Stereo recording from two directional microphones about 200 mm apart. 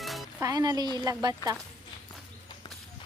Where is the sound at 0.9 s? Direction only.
20° right (ahead or behind).